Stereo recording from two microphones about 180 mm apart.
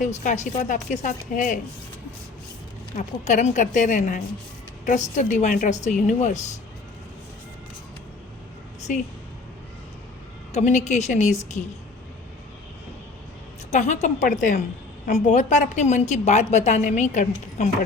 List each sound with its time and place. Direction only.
0.2 s a woman's voice: 45° left (ahead or behind)
2.9 s a woman's voice: 40° left (ahead or behind)
8.9 s a woman's voice: 45° left (ahead or behind)
10.5 s a woman's voice: 40° left (ahead or behind)
13.7 s a woman's voice: 40° left (ahead or behind)